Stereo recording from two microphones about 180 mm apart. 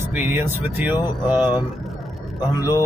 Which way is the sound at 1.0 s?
25° left (ahead or behind).